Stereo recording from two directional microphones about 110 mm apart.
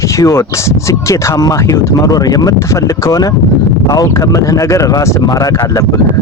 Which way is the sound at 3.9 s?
30° left (ahead or behind).